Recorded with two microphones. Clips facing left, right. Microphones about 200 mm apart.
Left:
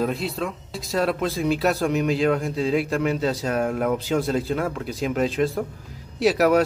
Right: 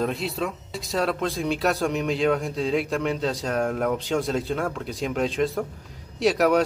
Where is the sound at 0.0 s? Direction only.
Centre (ahead or behind).